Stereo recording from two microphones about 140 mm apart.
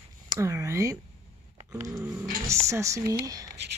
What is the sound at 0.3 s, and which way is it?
Speech, 20° right (ahead or behind).